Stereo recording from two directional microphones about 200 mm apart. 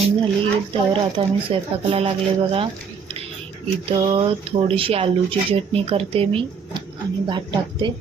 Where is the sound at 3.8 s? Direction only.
30° right (ahead or behind).